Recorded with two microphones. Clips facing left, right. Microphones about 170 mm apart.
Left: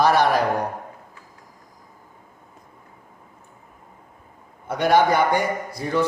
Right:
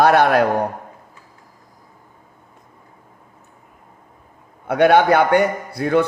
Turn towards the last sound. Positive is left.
turn(degrees=-60)  # may be behind; listen again after turning